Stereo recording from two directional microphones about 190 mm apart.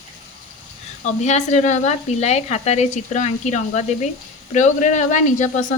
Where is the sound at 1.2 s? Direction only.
35° left (ahead or behind).